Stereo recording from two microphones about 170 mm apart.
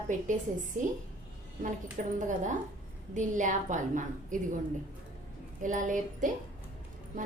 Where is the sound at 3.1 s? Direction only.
50° right (ahead or behind).